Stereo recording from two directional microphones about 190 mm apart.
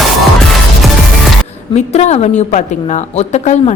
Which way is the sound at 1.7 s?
35° left (ahead or behind).